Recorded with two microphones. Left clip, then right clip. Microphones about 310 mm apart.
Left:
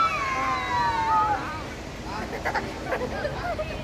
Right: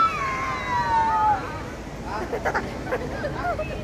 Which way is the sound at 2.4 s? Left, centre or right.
Centre.